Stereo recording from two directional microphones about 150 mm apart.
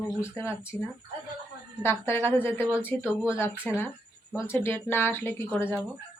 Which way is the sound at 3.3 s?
15° left (ahead or behind).